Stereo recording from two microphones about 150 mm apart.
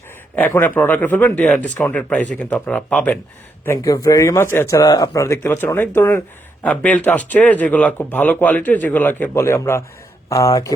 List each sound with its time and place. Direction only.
0.3 s speech: 10° left (ahead or behind)
3.7 s speech: 20° left (ahead or behind)